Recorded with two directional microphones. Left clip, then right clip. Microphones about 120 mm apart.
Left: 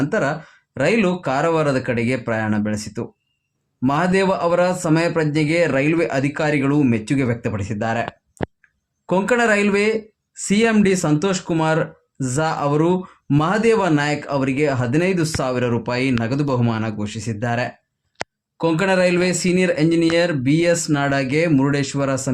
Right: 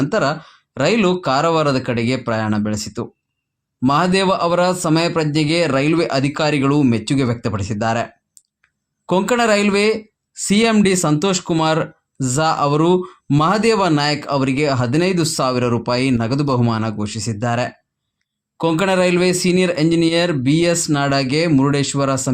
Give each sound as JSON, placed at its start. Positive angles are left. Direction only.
{"t": 0.0, "sound": "speech", "side_deg": -35}
{"t": 9.0, "sound": "speech", "side_deg": -30}